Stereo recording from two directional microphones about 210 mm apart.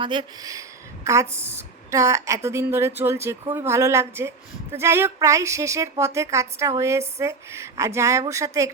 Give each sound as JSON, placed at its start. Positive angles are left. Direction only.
{"t": 0.0, "sound": "speech", "side_deg": -20}